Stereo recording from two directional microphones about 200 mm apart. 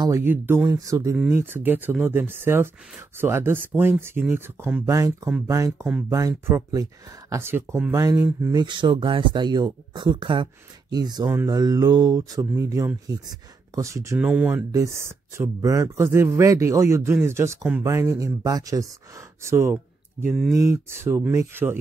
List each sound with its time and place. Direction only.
0.0 s speech: 15° right (ahead or behind)
5.9 s speech: 5° right (ahead or behind)
6.1 s speech: 15° right (ahead or behind)